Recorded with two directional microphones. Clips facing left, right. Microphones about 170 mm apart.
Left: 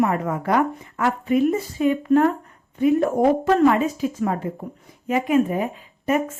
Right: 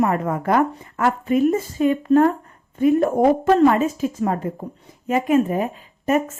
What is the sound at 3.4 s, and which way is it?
Speech, 30° right (ahead or behind).